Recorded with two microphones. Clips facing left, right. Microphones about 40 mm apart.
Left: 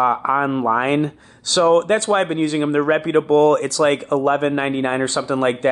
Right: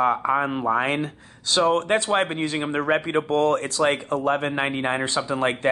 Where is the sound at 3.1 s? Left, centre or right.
Left.